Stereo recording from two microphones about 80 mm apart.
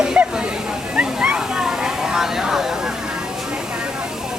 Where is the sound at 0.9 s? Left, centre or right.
Centre.